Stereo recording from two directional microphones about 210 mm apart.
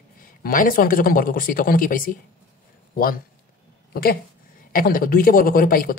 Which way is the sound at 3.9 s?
45° left (ahead or behind).